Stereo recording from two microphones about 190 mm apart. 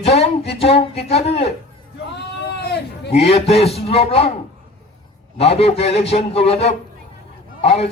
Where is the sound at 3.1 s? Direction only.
35° left (ahead or behind).